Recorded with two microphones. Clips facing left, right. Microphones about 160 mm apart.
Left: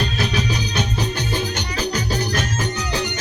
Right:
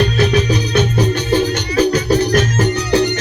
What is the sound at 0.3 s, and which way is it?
Music, 55° right (ahead or behind).